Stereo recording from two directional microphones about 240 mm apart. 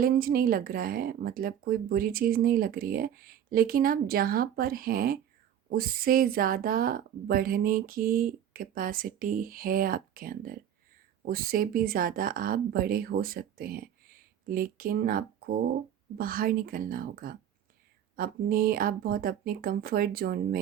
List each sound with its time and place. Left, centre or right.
0.0 s speech: right